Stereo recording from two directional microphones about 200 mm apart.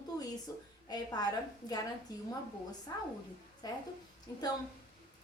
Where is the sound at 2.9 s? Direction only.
20° left (ahead or behind).